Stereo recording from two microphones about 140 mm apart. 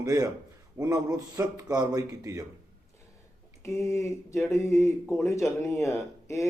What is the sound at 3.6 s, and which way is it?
Speech, 20° left (ahead or behind).